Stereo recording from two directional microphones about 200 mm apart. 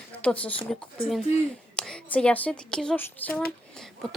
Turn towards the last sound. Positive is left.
turn(degrees=0)  # may be behind; listen again after turning